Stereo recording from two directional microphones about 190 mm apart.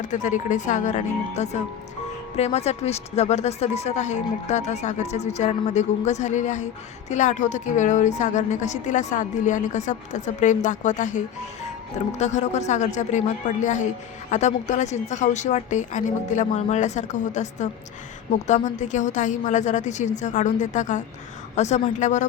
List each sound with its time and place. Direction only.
0.0 s a woman's voice: 40° left (ahead or behind)